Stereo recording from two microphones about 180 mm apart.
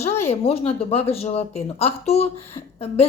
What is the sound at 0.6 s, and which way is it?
A woman's voice, 35° left (ahead or behind).